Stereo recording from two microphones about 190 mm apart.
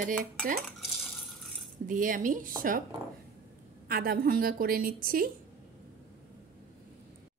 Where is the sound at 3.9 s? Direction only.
50° right (ahead or behind).